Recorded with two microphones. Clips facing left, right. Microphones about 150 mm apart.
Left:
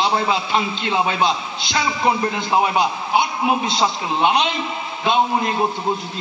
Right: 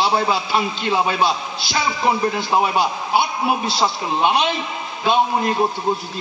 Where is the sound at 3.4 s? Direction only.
5° right (ahead or behind).